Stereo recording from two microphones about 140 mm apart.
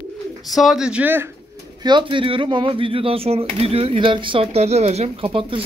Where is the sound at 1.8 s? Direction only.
35° right (ahead or behind).